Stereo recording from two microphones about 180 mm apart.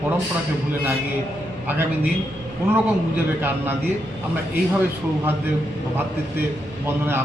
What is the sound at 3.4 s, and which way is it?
Speech, 10° right (ahead or behind).